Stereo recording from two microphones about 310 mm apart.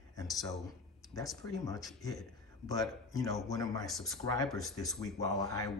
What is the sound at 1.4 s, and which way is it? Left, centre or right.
Speech, centre.